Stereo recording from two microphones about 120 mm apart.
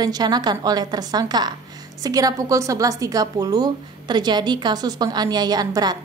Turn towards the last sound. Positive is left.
turn(degrees=-35)  # may be behind; listen again after turning